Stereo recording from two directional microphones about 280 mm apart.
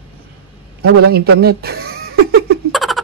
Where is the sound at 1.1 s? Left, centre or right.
Right.